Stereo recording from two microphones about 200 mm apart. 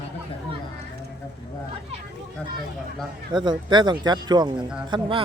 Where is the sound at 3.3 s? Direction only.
20° right (ahead or behind).